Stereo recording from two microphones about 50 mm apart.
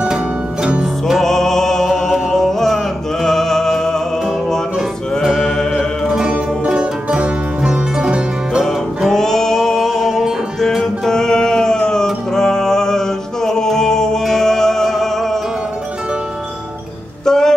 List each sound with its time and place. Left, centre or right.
0.0 s music: centre
1.2 s music: centre
5.4 s music: centre
6.0 s music: centre
6.3 s music: right
9.1 s music: centre
17.2 s music: centre